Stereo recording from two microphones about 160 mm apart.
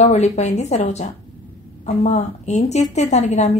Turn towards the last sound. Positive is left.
turn(degrees=45)  # may be behind; listen again after turning